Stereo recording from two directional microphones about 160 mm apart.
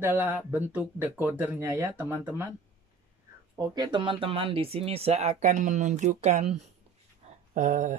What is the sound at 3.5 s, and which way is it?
Speech, 25° right (ahead or behind).